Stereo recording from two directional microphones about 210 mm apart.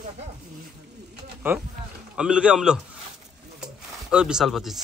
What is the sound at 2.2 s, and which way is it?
Speech, 5° right (ahead or behind).